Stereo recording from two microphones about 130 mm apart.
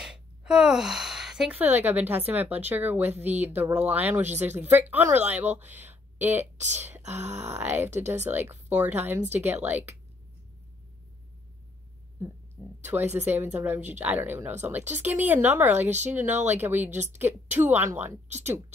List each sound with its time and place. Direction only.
0.0 s speech: 5° right (ahead or behind)
7.1 s speech: 60° right (ahead or behind)
7.4 s speech: 15° right (ahead or behind)
13.4 s speech: 15° right (ahead or behind)